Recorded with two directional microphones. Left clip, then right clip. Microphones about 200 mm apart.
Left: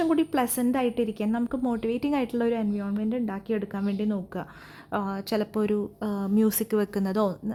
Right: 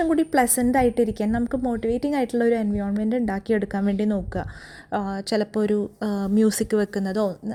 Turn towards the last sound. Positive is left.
turn(degrees=0)  # may be behind; listen again after turning